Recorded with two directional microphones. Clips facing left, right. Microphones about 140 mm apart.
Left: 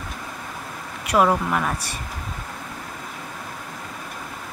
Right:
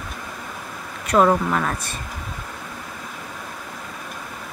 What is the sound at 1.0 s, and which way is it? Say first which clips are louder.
Speech: right 2 dB; 10° left (ahead or behind).